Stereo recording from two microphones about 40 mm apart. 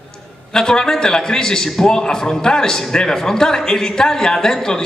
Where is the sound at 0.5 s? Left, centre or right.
Centre.